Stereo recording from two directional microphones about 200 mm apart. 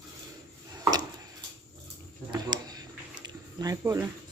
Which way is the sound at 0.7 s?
20° right (ahead or behind).